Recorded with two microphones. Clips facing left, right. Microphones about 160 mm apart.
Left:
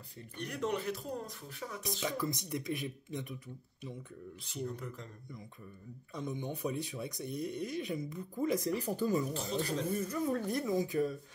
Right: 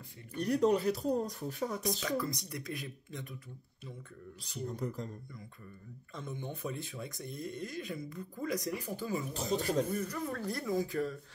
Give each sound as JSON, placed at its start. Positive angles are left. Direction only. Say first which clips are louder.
{"t": 0.4, "sound": "speech", "louder": "right 8 dB", "side_deg": -40}
{"t": 2.0, "sound": "speech", "louder": "right 1 dB", "side_deg": 20}
{"t": 4.7, "sound": "speech", "louder": "right 7 dB", "side_deg": -35}
{"t": 6.1, "sound": "speech", "louder": "left 3 dB", "side_deg": 15}
{"t": 9.3, "sound": "speech", "louder": "right 3 dB", "side_deg": -40}
{"t": 9.9, "sound": "speech", "louder": "left 3 dB", "side_deg": 25}